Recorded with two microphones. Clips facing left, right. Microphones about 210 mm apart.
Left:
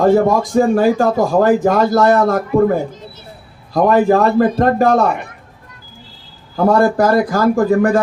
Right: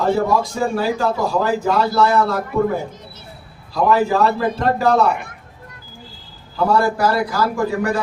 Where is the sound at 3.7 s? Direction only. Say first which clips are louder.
Left 5 dB; 50° left (ahead or behind).